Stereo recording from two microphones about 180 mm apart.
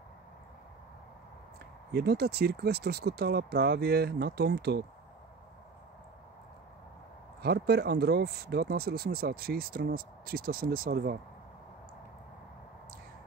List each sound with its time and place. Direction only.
1.9 s speech: 65° right (ahead or behind)
7.4 s speech: 60° right (ahead or behind)